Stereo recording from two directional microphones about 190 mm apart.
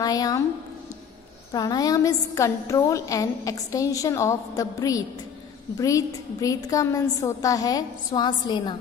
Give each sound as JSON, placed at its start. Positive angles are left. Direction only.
{"t": 0.0, "sound": "a woman's voice", "side_deg": 20}
{"t": 1.5, "sound": "a woman's voice", "side_deg": 20}